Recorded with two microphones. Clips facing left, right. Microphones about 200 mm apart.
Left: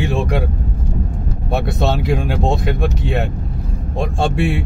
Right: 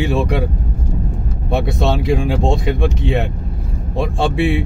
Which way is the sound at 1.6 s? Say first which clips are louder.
Right 1 dB; centre (ahead or behind).